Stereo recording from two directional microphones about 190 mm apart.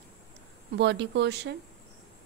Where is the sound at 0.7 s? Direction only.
65° right (ahead or behind).